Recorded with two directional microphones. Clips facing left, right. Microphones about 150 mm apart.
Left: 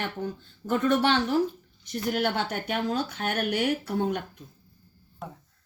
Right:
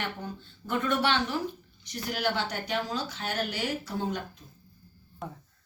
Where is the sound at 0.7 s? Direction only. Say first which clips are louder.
Left 4 dB; 40° left (ahead or behind); by 4.2 s 60° left (ahead or behind).